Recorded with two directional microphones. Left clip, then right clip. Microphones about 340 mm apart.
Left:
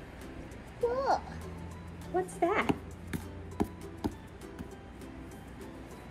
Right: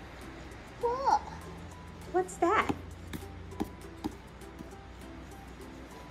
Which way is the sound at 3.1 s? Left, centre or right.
Centre.